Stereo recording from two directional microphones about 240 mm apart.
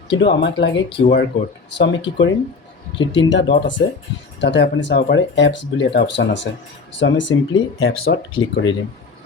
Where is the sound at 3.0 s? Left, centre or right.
Left.